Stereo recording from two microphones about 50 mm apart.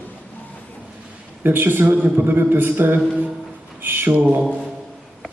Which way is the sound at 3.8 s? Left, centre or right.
Right.